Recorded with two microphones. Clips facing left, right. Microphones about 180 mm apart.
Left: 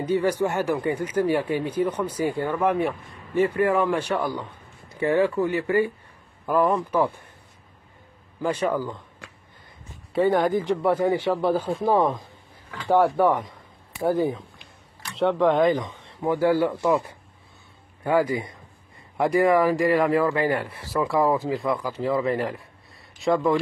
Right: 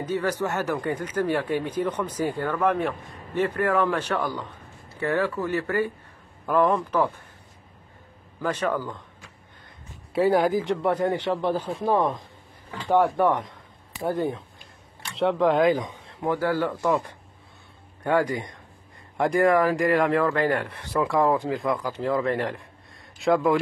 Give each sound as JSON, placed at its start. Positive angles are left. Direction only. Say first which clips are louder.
{"t": 0.0, "sound": "speech", "louder": "left 4 dB", "side_deg": 10}
{"t": 8.4, "sound": "speech", "louder": "left 2 dB", "side_deg": 10}
{"t": 10.1, "sound": "speech", "louder": "even", "side_deg": -5}
{"t": 16.3, "sound": "speech", "louder": "left 4 dB", "side_deg": 10}